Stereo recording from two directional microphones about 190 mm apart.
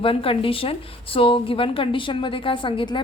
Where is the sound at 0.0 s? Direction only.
30° left (ahead or behind).